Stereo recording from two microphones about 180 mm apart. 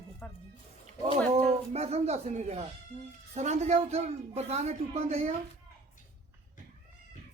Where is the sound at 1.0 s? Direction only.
35° right (ahead or behind).